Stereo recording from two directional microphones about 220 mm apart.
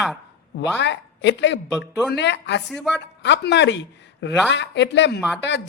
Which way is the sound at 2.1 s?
50° left (ahead or behind).